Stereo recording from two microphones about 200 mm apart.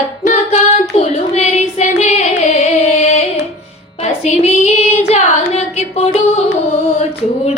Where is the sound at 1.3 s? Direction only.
35° left (ahead or behind).